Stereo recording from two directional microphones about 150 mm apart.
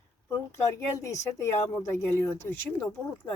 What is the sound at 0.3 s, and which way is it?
Speech, 20° left (ahead or behind).